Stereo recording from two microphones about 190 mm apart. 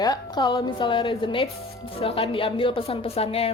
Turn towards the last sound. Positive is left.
turn(degrees=30)  # may be behind; listen again after turning